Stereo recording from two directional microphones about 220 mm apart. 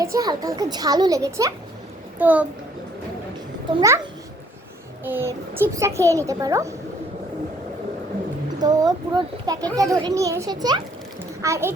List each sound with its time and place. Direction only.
0.0 s a child's voice: 15° right (ahead or behind)
3.8 s a child's voice: 15° right (ahead or behind)
5.0 s a child's voice: 10° right (ahead or behind)
8.6 s a child's voice: 15° right (ahead or behind)